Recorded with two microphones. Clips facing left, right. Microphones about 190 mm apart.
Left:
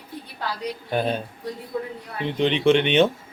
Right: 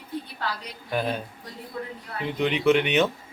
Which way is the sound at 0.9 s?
25° left (ahead or behind).